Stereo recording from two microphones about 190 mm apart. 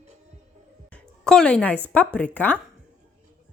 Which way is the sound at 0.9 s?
5° left (ahead or behind).